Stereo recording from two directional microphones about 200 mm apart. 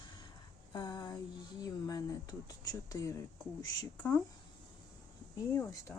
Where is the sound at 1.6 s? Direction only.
20° left (ahead or behind).